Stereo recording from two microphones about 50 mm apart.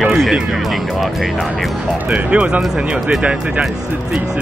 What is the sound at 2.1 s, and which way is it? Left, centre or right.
Speech, right.